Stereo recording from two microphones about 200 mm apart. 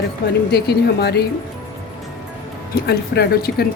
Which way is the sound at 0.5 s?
55° left (ahead or behind).